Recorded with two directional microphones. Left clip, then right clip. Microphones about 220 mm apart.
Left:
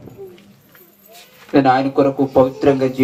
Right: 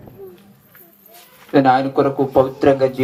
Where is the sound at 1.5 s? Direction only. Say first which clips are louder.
Even; 35° right (ahead or behind).